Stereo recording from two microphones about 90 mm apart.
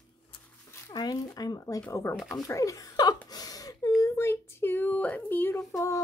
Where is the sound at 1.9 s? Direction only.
35° left (ahead or behind).